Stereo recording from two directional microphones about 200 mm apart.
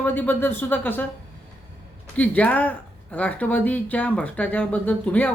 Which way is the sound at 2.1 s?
10° left (ahead or behind).